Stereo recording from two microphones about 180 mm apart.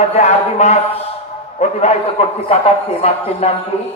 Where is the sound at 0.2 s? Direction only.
40° left (ahead or behind).